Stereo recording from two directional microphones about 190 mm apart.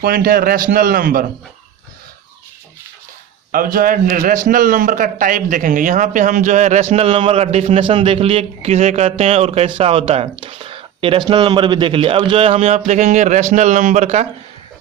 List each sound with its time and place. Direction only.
0.0 s a man's voice: 50° right (ahead or behind)
3.5 s a man's voice: 50° right (ahead or behind)